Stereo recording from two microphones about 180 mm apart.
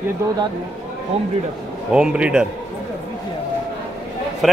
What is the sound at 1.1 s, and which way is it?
Speech, 35° right (ahead or behind).